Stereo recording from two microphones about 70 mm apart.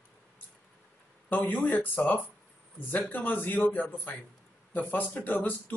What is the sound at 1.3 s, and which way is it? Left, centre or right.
Speech, left.